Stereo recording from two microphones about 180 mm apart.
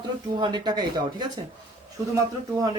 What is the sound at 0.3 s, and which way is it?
Speech, 25° right (ahead or behind).